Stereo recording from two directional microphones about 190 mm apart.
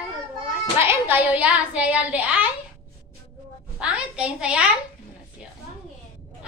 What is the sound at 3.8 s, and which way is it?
Speech, 5° right (ahead or behind).